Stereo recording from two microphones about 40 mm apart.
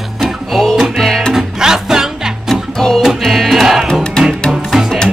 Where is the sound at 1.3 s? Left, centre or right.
Centre.